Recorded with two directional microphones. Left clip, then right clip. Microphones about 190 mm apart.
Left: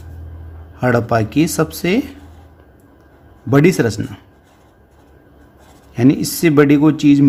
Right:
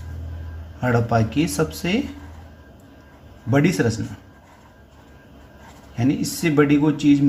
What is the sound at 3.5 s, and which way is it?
Speech, 35° left (ahead or behind).